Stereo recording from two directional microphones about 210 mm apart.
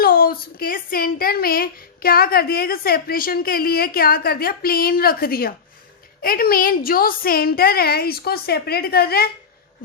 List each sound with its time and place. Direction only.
0.0 s speech: 45° left (ahead or behind)